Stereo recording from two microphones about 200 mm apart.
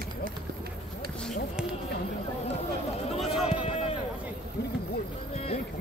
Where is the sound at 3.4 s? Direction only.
30° left (ahead or behind).